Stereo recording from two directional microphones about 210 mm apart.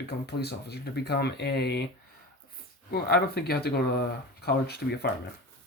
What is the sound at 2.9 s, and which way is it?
Speech, 50° left (ahead or behind).